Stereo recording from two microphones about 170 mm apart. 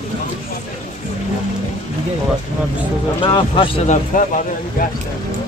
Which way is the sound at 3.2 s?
30° left (ahead or behind).